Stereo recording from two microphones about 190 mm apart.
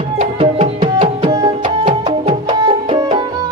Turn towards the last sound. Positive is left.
turn(degrees=-30)  # may be behind; listen again after turning